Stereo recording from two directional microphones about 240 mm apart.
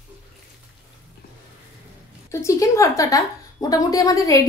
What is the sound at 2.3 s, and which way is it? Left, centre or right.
A woman's voice, centre.